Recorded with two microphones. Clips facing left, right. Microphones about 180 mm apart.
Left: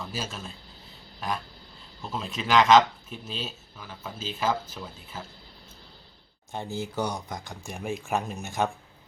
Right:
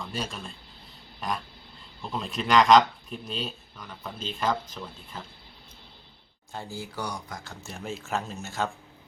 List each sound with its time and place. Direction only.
0.0 s speech: 5° left (ahead or behind)
6.5 s speech: 20° left (ahead or behind)